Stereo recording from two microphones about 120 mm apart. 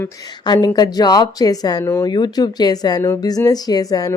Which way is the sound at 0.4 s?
35° left (ahead or behind).